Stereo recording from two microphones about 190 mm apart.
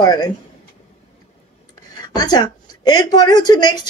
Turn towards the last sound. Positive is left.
turn(degrees=20)  # may be behind; listen again after turning